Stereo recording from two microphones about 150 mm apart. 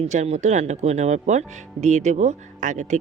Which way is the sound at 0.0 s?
50° right (ahead or behind).